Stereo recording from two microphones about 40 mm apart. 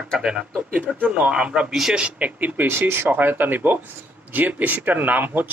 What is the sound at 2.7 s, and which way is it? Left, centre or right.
Speech, right.